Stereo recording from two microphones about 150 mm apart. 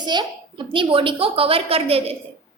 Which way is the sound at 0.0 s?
30° right (ahead or behind).